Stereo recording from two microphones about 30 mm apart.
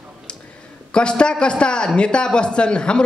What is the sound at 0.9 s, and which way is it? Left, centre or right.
A man's voice, left.